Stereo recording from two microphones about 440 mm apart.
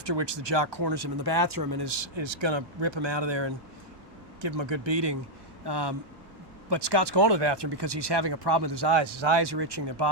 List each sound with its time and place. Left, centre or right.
0.0 s speech: right
4.4 s speech: right